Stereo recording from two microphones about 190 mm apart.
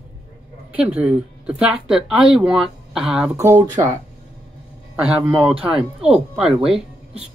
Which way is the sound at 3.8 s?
30° right (ahead or behind).